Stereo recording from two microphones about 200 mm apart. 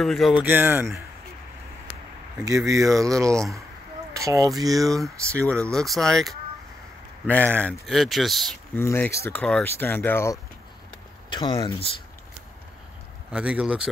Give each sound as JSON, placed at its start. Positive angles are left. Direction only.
{"t": 0.0, "sound": "speech", "side_deg": 0}
{"t": 2.4, "sound": "speech", "side_deg": -15}
{"t": 5.5, "sound": "speech", "side_deg": 5}
{"t": 7.2, "sound": "speech", "side_deg": 10}
{"t": 8.7, "sound": "speech", "side_deg": 10}
{"t": 11.3, "sound": "speech", "side_deg": 25}
{"t": 13.3, "sound": "speech", "side_deg": -5}